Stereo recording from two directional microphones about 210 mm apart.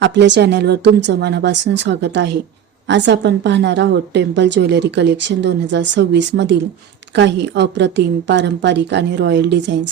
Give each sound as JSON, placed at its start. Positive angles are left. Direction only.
{"t": 0.0, "sound": "a woman's voice", "side_deg": -55}